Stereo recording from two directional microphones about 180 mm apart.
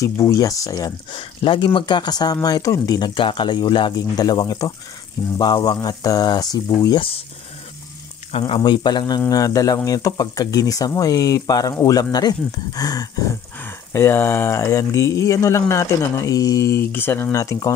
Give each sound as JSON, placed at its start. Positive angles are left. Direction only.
{"t": 0.0, "sound": "speech", "side_deg": 20}
{"t": 8.3, "sound": "speech", "side_deg": 30}